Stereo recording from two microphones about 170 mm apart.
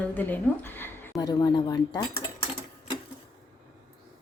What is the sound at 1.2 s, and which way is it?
Speech, 25° left (ahead or behind).